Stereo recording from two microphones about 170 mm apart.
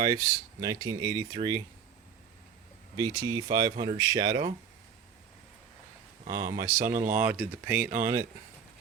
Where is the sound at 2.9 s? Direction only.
25° right (ahead or behind).